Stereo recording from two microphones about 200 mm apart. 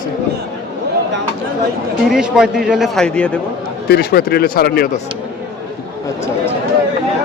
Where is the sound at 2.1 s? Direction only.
5° right (ahead or behind).